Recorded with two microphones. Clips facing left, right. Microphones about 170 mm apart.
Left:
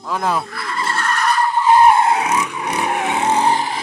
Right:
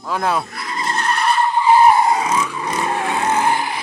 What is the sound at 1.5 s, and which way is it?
Skidding, 5° right (ahead or behind).